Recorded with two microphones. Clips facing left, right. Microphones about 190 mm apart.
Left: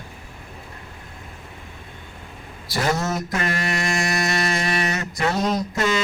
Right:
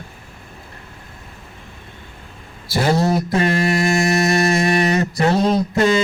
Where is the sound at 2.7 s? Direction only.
30° right (ahead or behind).